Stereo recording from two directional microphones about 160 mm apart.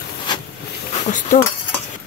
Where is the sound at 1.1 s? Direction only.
55° left (ahead or behind).